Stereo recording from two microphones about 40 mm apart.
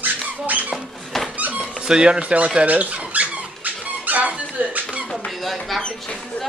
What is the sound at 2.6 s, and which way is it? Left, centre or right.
Squeak, right.